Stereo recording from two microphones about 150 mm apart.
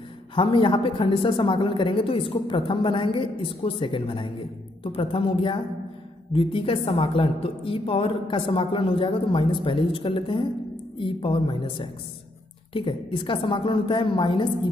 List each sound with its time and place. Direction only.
0.3 s a woman's voice: 35° left (ahead or behind)